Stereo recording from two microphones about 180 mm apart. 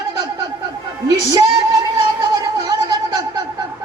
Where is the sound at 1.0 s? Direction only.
20° right (ahead or behind).